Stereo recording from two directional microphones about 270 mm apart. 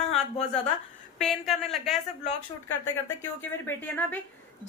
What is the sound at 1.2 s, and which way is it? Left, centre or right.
Speech, centre.